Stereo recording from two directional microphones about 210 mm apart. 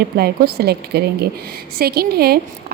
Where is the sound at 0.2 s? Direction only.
50° right (ahead or behind).